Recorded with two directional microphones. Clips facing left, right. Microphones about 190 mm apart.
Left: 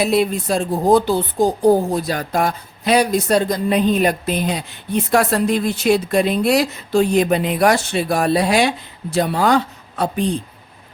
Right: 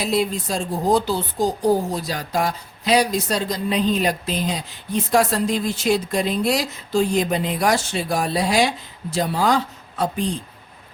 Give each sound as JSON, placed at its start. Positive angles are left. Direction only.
{"t": 0.0, "sound": "a woman's voice", "side_deg": 60}